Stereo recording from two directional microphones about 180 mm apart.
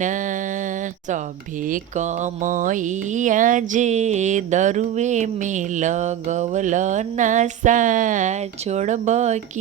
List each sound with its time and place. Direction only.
0.0 s mantra: 45° right (ahead or behind)
1.6 s speech: 45° right (ahead or behind)